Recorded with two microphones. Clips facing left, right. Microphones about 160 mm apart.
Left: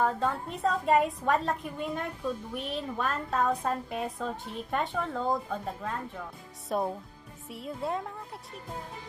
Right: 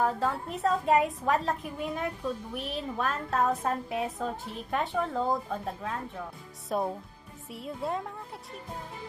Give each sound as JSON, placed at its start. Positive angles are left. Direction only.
{"t": 0.0, "sound": "a woman's voice", "side_deg": 0}